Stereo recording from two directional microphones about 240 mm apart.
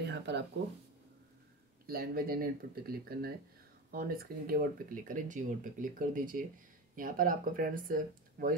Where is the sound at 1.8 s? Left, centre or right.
Right.